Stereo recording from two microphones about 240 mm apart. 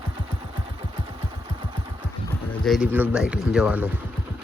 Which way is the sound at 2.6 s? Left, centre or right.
Centre.